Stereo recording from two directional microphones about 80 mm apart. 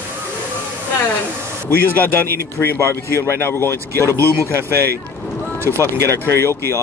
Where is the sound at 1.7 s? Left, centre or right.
Left.